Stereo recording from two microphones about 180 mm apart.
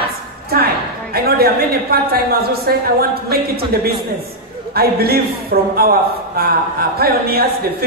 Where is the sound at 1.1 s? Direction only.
60° right (ahead or behind).